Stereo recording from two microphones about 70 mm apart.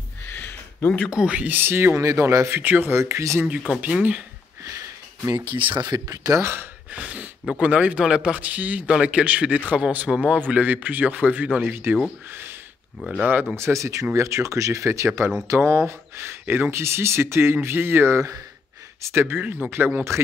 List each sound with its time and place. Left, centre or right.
0.3 s a sound: left
1.0 s a man's voice: centre; by 1.9 s right
2.0 s speech: right
2.6 s a man's voice: right
3.0 s speech: right
3.8 s a man's voice: right
4.6 s sniff: right
5.8 s speech: right
6.4 s speech: right
6.9 s a man's voice: right
13.2 s a man's voice: right
13.6 s a man's voice: right